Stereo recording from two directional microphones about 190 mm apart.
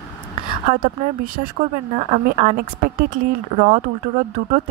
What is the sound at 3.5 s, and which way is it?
Speech, 40° right (ahead or behind).